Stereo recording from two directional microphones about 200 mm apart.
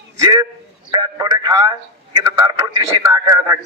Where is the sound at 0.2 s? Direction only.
20° right (ahead or behind).